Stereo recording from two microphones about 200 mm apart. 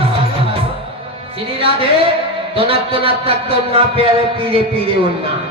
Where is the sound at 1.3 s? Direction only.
30° right (ahead or behind).